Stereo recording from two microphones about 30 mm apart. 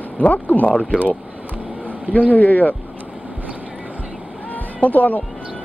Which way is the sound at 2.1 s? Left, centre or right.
Left.